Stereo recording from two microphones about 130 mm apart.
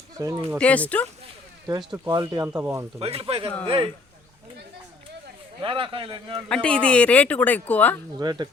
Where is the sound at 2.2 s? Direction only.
20° right (ahead or behind).